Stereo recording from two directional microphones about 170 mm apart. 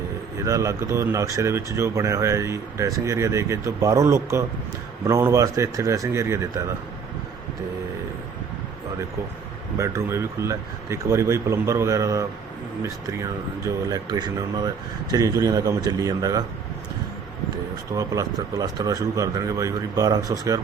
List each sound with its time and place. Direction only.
0.4 s speech: 20° right (ahead or behind)
9.7 s speech: 15° right (ahead or behind)
17.9 s speech: 20° right (ahead or behind)